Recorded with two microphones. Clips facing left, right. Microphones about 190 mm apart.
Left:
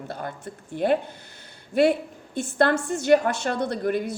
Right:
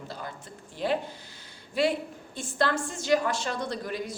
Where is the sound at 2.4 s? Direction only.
60° left (ahead or behind).